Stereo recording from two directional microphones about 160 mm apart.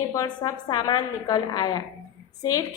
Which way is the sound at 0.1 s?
20° left (ahead or behind).